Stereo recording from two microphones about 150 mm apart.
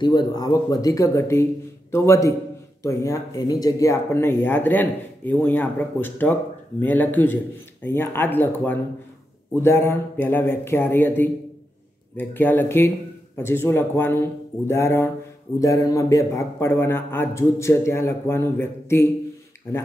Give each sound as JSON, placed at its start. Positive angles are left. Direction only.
{"t": 0.0, "sound": "speech", "side_deg": 30}